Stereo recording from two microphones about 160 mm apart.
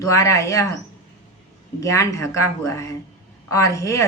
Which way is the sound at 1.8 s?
20° left (ahead or behind).